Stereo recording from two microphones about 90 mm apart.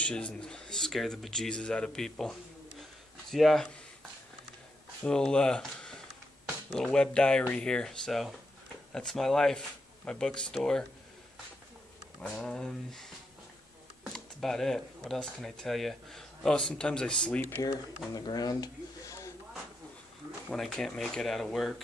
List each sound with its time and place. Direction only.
0.0 s speech: 10° left (ahead or behind)
5.0 s speech: 10° left (ahead or behind)
12.2 s speech: 5° left (ahead or behind)
14.1 s speech: 5° left (ahead or behind)
17.6 s speech: 45° left (ahead or behind)
20.4 s speech: 5° left (ahead or behind)